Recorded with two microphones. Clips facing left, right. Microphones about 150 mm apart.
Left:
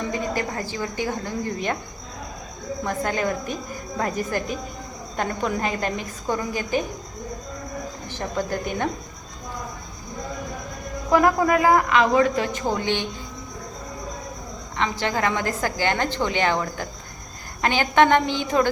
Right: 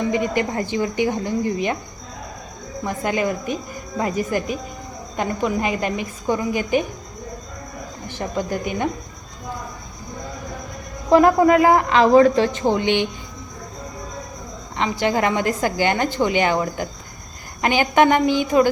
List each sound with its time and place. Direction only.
0.1 s a woman's voice: 20° right (ahead or behind)
2.8 s a woman's voice: 10° right (ahead or behind)
8.0 s speech: 15° right (ahead or behind)
11.1 s a woman's voice: 25° right (ahead or behind)
14.8 s a woman's voice: 15° right (ahead or behind)